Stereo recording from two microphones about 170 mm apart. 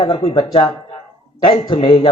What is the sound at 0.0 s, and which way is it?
Speech, 30° left (ahead or behind).